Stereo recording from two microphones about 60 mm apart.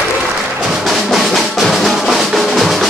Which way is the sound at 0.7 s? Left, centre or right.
Centre.